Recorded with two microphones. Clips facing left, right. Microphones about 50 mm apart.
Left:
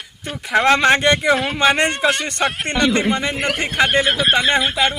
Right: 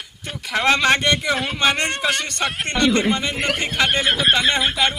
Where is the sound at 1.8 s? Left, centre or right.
Centre.